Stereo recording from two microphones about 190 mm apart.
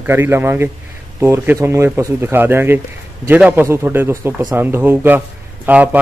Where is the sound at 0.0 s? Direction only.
10° right (ahead or behind).